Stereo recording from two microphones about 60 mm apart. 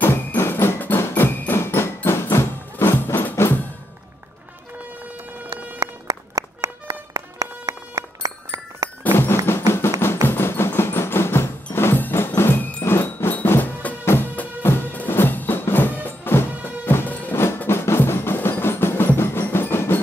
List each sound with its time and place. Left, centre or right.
0.0 s music: left
6.0 s run: right
7.2 s music: right
9.5 s music: left
17.6 s percussion: left